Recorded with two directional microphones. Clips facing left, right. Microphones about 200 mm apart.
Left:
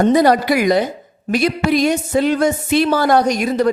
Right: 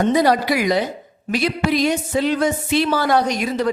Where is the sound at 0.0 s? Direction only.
50° left (ahead or behind).